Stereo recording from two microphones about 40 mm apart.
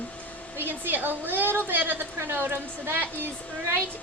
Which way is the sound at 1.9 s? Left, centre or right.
Right.